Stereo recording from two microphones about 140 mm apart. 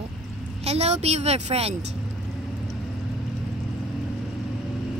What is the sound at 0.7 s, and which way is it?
Speech, 50° right (ahead or behind).